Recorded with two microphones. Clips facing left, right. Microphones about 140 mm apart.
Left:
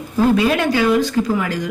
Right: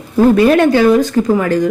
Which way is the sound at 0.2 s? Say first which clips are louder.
Right 7 dB; 50° right (ahead or behind).